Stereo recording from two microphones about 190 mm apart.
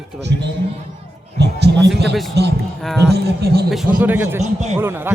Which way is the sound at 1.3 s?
60° right (ahead or behind).